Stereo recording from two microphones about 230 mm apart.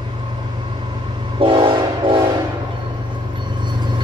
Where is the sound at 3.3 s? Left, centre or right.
Centre.